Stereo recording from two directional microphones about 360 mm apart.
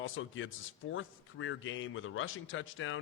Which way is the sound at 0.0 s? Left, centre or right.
Left.